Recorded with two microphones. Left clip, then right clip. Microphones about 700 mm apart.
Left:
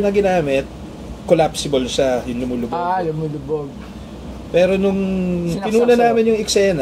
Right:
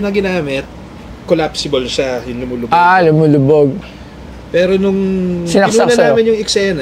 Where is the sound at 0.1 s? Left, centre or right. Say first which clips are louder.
Even; centre.